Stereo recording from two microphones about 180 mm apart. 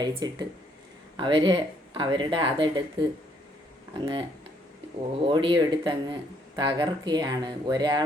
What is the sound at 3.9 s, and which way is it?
Speech, 25° right (ahead or behind).